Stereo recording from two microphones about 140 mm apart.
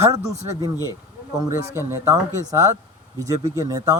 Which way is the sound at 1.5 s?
20° right (ahead or behind).